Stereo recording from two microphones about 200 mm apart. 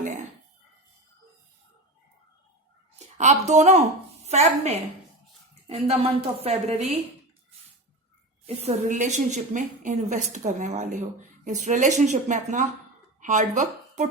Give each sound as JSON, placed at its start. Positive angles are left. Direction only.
{"t": 3.0, "sound": "a woman's voice", "side_deg": -35}
{"t": 8.4, "sound": "a woman's voice", "side_deg": -35}